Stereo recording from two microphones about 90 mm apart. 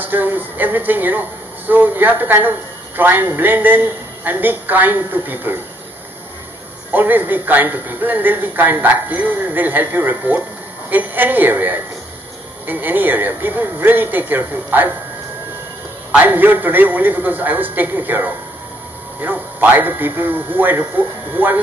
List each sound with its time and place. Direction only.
0.0 s a man's voice: 20° right (ahead or behind)
6.9 s a man's voice: 20° right (ahead or behind)
16.1 s a man's voice: 20° right (ahead or behind)